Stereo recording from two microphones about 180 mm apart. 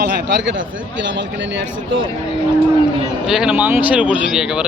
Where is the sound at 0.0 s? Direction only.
75° right (ahead or behind); by 2.0 s 90° right.